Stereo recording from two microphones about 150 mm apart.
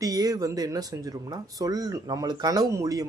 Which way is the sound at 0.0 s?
25° right (ahead or behind).